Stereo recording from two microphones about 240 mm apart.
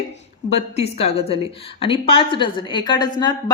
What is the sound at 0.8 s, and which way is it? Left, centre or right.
A woman's voice, left.